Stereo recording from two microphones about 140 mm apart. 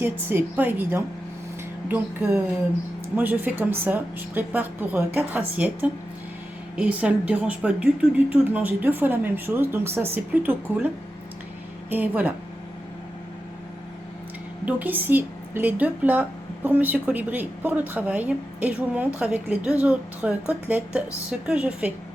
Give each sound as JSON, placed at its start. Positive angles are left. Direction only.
{"t": 0.0, "sound": "a woman's voice", "side_deg": -15}
{"t": 3.2, "sound": "a woman's voice", "side_deg": -15}
{"t": 14.6, "sound": "a woman's voice", "side_deg": -10}